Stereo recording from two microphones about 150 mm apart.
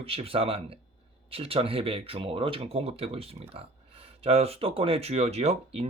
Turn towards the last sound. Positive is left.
turn(degrees=-45)  # may be behind; listen again after turning